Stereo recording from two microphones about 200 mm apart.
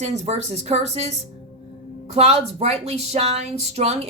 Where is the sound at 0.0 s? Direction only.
35° right (ahead or behind).